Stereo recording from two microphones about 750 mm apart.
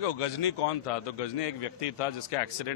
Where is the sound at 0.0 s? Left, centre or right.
Left.